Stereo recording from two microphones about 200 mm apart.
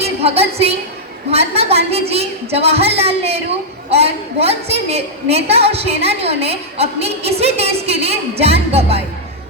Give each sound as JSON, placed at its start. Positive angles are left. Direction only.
{"t": 0.0, "sound": "a woman's voice", "side_deg": -30}